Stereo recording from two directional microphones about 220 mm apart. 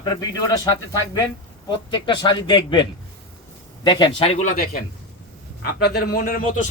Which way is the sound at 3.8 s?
20° left (ahead or behind).